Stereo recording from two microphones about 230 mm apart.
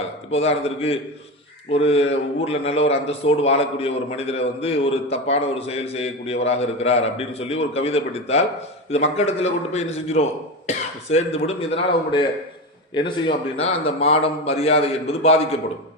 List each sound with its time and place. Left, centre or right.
0.3 s a man's voice: left